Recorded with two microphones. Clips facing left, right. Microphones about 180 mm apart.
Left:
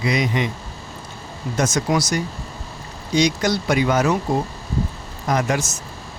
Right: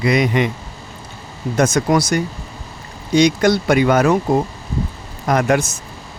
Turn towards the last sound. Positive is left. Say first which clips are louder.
# right 5 dB
turn(degrees=-55)  # may be behind; listen again after turning